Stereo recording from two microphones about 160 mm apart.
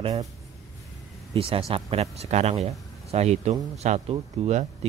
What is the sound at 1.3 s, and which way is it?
Speech, 35° right (ahead or behind).